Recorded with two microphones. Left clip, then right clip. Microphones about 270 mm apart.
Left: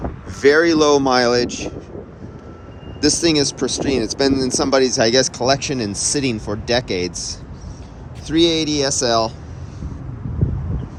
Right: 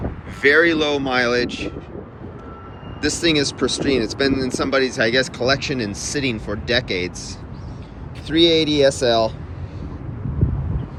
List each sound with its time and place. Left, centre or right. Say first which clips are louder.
0.3 s speech: left 1 dB; centre
3.0 s speech: left 2 dB; centre